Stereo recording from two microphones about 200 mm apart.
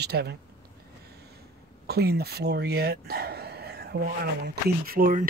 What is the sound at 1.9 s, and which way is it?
Speech, 55° right (ahead or behind).